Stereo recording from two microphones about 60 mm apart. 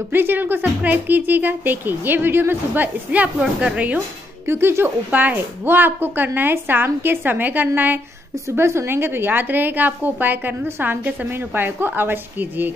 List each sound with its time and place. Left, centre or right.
0.1 s a woman's voice: right
4.5 s speech: right
5.1 s a woman's voice: right
8.5 s a woman's voice: right